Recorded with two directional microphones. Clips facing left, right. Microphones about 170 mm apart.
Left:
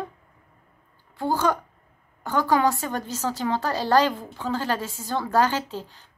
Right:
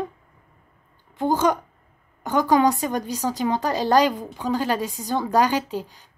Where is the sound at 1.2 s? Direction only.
20° right (ahead or behind).